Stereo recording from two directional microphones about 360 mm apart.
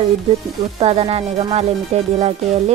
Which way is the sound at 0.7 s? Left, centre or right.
Centre.